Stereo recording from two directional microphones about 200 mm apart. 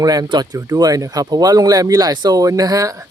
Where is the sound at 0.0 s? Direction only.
20° right (ahead or behind).